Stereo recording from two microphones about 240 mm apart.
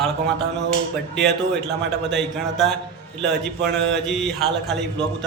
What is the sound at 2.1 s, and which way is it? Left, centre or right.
Speech, centre.